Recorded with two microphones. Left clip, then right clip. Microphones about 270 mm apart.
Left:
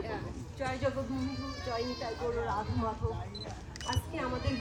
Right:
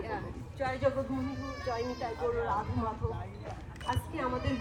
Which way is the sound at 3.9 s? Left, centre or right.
Centre.